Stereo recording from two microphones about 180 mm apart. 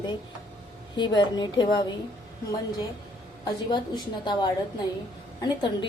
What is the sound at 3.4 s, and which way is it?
A woman's voice, 25° left (ahead or behind).